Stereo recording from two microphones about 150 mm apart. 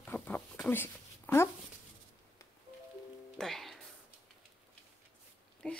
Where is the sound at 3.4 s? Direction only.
Centre (ahead or behind).